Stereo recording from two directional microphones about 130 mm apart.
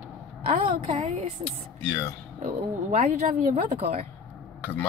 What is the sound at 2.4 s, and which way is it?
Speech, 65° right (ahead or behind).